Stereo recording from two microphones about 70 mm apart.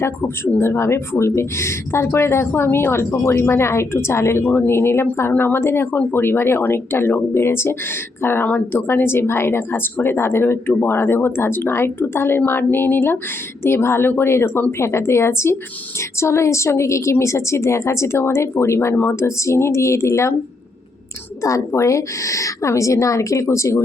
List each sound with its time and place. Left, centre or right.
0.0 s speech: left
6.0 s speech: left
6.2 s a woman's voice: left
21.4 s a woman's voice: left